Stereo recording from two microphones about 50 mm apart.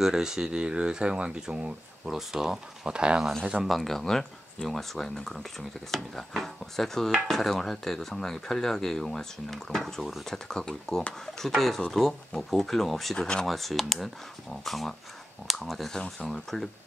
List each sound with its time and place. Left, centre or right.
0.0 s speech: centre
2.0 s speech: centre
2.9 s speech: centre
3.6 s speech: centre
13.5 s speech: centre